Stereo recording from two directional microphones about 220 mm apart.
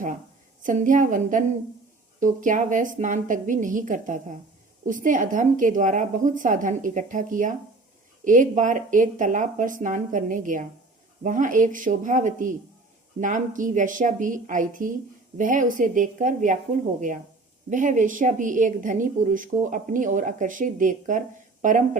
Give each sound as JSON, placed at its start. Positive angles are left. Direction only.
{"t": 0.6, "sound": "a woman's voice", "side_deg": -35}
{"t": 17.7, "sound": "a woman's voice", "side_deg": -35}